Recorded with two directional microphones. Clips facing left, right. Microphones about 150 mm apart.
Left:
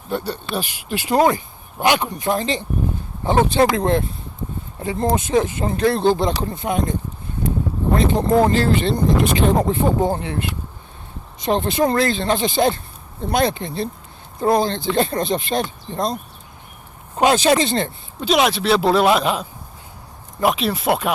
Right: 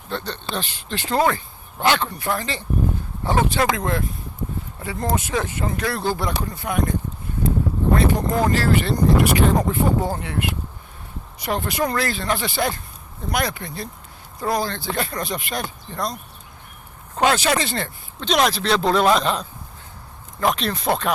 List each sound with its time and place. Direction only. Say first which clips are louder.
0.1 s speech: left 4 dB; 10° left (ahead or behind)
7.9 s speech: left 5 dB; 25° left (ahead or behind)
17.2 s speech: left 4 dB; 20° left (ahead or behind)
18.2 s speech: left 2 dB; 5° left (ahead or behind)